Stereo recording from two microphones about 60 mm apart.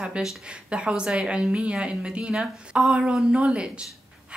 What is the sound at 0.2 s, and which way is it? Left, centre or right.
A woman's voice, centre.